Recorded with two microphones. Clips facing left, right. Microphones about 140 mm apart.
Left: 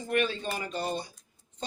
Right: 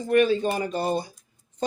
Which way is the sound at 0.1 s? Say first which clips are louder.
Right 9 dB; 40° right (ahead or behind).